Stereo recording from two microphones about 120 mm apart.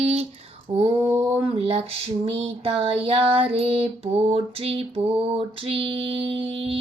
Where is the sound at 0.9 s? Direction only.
15° right (ahead or behind).